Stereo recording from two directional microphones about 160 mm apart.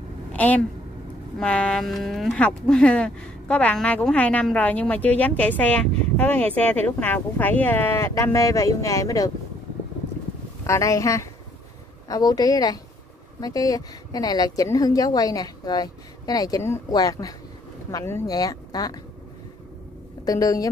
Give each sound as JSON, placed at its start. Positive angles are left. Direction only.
{"t": 0.3, "sound": "a woman's voice", "side_deg": 10}
{"t": 10.6, "sound": "speech", "side_deg": 20}
{"t": 20.2, "sound": "speech", "side_deg": 20}